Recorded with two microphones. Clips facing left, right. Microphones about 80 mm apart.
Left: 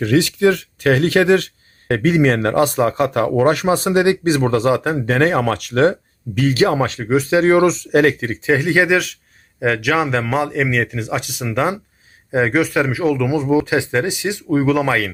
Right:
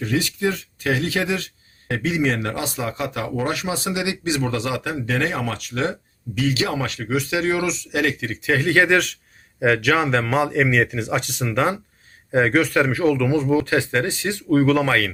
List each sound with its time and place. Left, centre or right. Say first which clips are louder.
0.0 s speech: left 8 dB; left
1.9 s a man's voice: left 7 dB; left
8.4 s speech: left 2 dB; centre